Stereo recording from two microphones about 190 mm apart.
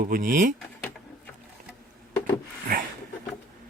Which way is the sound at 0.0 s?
45° right (ahead or behind).